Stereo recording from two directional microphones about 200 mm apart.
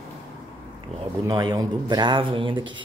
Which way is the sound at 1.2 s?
20° right (ahead or behind).